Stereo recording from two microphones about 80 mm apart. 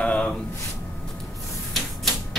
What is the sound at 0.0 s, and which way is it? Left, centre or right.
Gasp, centre.